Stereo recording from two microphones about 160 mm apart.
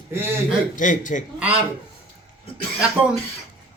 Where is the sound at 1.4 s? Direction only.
10° right (ahead or behind).